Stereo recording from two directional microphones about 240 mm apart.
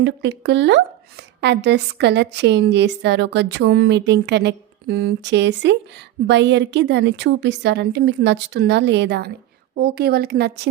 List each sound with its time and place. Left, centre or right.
0.0 s a woman's voice: right